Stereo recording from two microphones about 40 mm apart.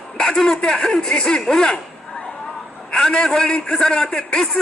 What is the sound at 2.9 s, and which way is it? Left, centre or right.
A man's voice, centre.